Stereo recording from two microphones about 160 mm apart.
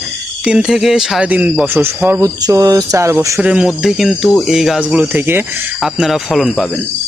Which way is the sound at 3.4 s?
5° right (ahead or behind).